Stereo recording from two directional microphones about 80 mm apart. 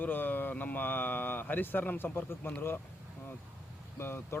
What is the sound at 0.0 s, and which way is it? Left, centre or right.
Speech, left.